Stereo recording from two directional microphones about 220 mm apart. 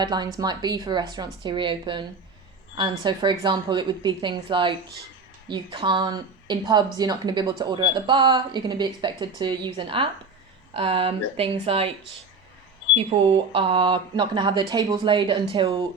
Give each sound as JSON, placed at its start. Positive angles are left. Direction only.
{"t": 0.0, "sound": "a woman's voice", "side_deg": -20}
{"t": 12.9, "sound": "a woman's voice", "side_deg": -25}